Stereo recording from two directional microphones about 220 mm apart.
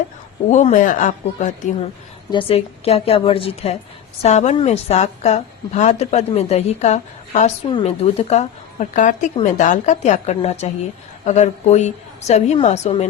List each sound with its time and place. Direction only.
0.5 s a woman's voice: 35° left (ahead or behind)